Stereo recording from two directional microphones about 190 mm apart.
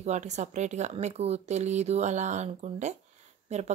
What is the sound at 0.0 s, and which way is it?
Speech, 35° right (ahead or behind).